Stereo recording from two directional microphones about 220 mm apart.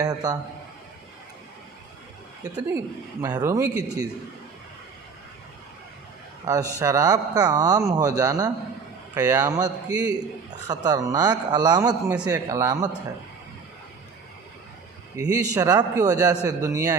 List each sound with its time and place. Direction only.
0.0 s a man's voice: 15° right (ahead or behind)
2.4 s a man's voice: 15° right (ahead or behind)
6.4 s a man's voice: 15° right (ahead or behind)
15.1 s a man's voice: 15° right (ahead or behind)